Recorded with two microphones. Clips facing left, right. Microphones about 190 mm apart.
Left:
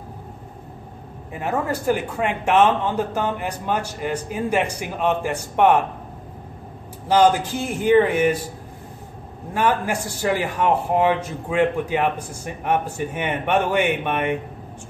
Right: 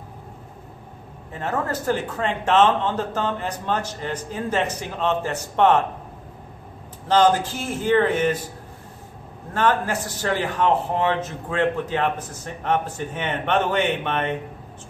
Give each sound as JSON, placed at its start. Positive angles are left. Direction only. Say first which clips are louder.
{"t": 1.3, "sound": "a man's voice", "louder": "left 2 dB", "side_deg": 10}
{"t": 7.1, "sound": "a man's voice", "louder": "left 1 dB", "side_deg": 10}
{"t": 9.5, "sound": "a man's voice", "louder": "even", "side_deg": 10}